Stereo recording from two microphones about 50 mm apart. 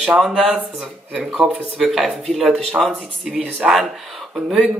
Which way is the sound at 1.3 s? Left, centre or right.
Centre.